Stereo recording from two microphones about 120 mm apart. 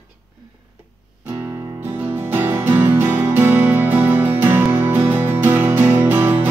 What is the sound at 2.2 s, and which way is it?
Music, 20° right (ahead or behind).